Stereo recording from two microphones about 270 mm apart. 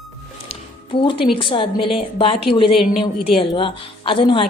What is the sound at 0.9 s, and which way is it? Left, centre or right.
A woman's voice, centre.